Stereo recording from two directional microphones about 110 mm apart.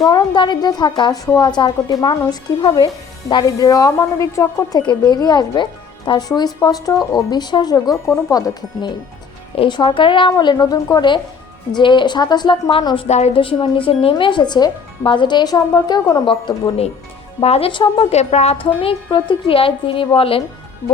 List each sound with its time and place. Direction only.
0.1 s speech: 40° left (ahead or behind)
1.1 s speech: 30° left (ahead or behind)
4.8 s speech: 40° left (ahead or behind)
9.6 s speech: 45° left (ahead or behind)
13.1 s a woman's voice: 85° left
13.4 s speech: 55° left (ahead or behind); by 16.2 s 35° left (ahead or behind)
16.2 s a woman's voice: 55° left (ahead or behind)
17.7 s speech: 45° left (ahead or behind)
18.1 s speech: 80° left
18.6 s a woman's voice: 55° left (ahead or behind)